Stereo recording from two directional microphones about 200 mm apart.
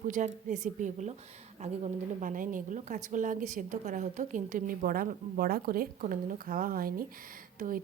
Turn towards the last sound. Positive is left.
turn(degrees=-45)  # may be behind; listen again after turning